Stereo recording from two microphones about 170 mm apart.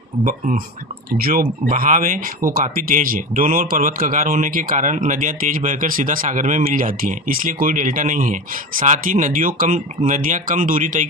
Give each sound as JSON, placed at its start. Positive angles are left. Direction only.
{"t": 0.3, "sound": "speech", "side_deg": -55}